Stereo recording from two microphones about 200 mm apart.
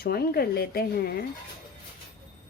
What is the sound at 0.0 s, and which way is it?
Speech, 50° left (ahead or behind).